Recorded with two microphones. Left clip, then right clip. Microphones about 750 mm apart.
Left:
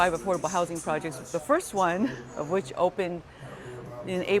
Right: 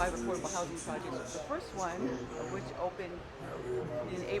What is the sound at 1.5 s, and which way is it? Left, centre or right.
Speech, left.